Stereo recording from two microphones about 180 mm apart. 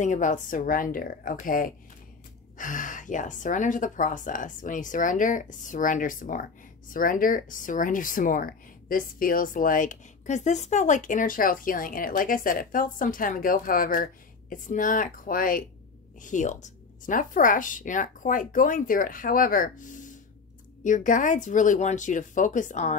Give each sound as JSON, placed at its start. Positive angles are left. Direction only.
{"t": 0.0, "sound": "speech", "side_deg": 45}